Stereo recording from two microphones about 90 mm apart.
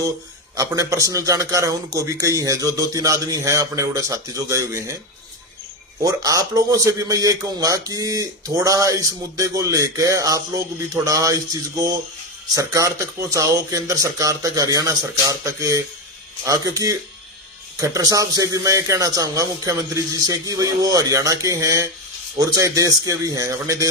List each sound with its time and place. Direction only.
0.5 s a man's voice: 35° right (ahead or behind)
6.0 s a man's voice: 40° right (ahead or behind)